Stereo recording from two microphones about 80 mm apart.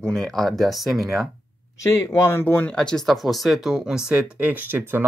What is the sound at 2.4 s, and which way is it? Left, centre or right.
Speech, left.